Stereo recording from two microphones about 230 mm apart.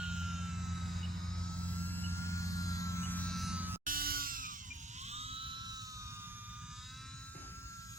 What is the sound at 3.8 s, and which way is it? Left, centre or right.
Music, right.